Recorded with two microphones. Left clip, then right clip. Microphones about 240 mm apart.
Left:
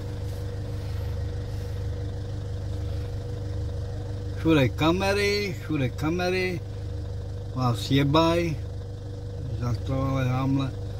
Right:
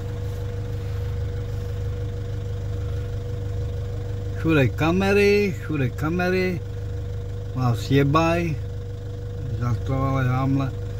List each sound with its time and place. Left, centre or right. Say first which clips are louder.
4.5 s speech: right 1 dB; right
7.5 s speech: right 3 dB; right
9.6 s speech: right 3 dB; right